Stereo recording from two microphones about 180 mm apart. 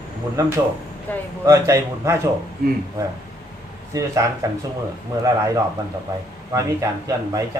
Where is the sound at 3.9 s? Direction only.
20° right (ahead or behind).